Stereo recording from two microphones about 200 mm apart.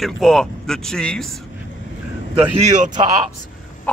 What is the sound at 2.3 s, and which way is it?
Speech, 25° right (ahead or behind).